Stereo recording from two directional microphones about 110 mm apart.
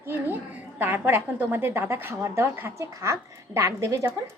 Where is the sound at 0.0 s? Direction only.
20° right (ahead or behind).